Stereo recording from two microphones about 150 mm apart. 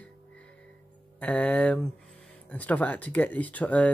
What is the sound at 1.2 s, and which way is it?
Speech, 10° left (ahead or behind).